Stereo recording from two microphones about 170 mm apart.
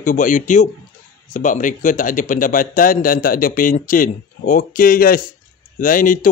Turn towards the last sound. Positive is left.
turn(degrees=50)  # may be behind; listen again after turning